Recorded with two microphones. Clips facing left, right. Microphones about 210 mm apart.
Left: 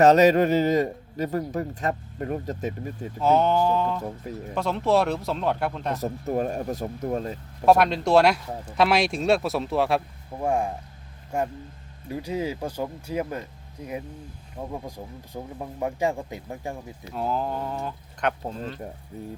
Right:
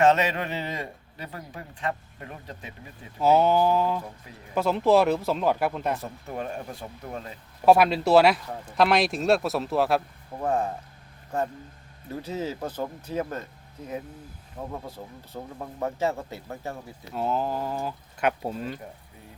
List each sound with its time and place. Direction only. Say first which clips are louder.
0.0 s a man's voice: left 6 dB; 40° left (ahead or behind)
3.2 s speech: right 1 dB; 5° right (ahead or behind)
6.0 s speech: left 8 dB; 40° left (ahead or behind)
7.6 s speech: even; 5° right (ahead or behind)
10.4 s speech: left 1 dB; 10° left (ahead or behind)
14.6 s speech: left 2 dB; 15° left (ahead or behind)
17.2 s speech: even; centre (ahead or behind)